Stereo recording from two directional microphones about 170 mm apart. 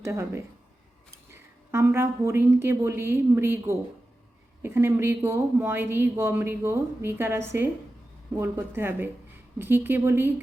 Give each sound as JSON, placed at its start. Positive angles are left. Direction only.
{"t": 0.0, "sound": "speech", "side_deg": -15}